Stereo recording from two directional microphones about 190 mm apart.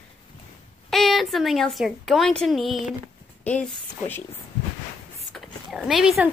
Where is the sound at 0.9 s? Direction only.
Centre (ahead or behind).